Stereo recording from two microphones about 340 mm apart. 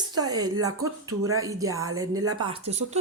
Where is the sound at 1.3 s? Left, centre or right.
Centre.